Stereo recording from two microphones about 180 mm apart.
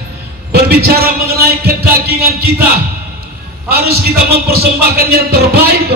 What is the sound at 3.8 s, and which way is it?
Music, 60° right (ahead or behind).